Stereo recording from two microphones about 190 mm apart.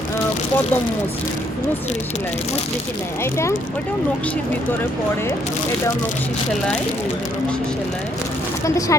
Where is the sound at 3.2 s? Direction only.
15° left (ahead or behind).